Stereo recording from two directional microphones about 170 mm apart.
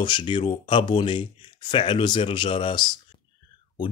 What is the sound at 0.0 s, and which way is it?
Speech, 30° left (ahead or behind).